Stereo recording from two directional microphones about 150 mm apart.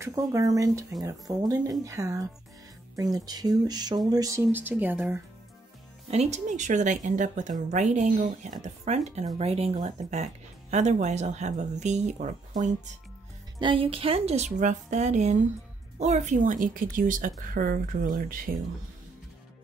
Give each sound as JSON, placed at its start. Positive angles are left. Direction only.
{"t": 0.0, "sound": "speech", "side_deg": -20}
{"t": 6.0, "sound": "speech", "side_deg": -45}
{"t": 13.6, "sound": "a woman's voice", "side_deg": -35}